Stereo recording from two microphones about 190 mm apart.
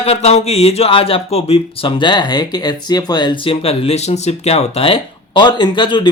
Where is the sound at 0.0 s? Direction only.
35° left (ahead or behind).